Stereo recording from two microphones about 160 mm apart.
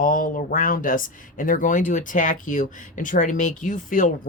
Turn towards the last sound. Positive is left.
turn(degrees=55)  # may be behind; listen again after turning